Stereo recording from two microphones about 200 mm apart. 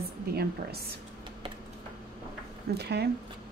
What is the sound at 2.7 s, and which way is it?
Speech, 55° right (ahead or behind).